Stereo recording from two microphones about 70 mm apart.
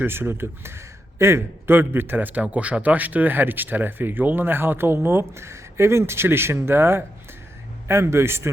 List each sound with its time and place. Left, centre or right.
0.0 s a man's voice: right